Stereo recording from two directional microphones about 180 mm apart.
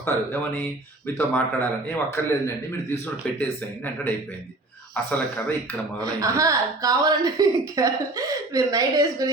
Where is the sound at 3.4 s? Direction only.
10° left (ahead or behind).